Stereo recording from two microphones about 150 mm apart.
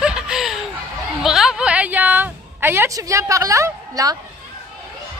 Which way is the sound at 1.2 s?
5° right (ahead or behind).